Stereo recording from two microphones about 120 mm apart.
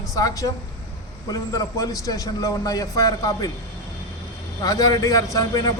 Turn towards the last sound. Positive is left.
turn(degrees=30)  # may be behind; listen again after turning